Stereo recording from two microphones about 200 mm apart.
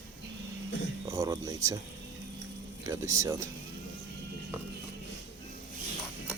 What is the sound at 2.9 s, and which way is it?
Speech, 15° right (ahead or behind).